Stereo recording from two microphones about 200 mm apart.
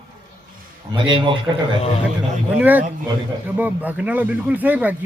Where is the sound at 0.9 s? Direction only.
25° right (ahead or behind).